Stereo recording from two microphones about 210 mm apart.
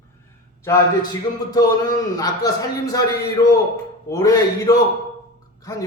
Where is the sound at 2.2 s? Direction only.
15° left (ahead or behind).